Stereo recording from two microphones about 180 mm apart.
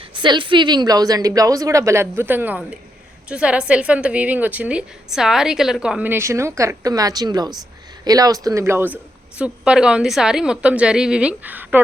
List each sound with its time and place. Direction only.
0.1 s a woman's voice: 25° right (ahead or behind); by 11.8 s 10° right (ahead or behind)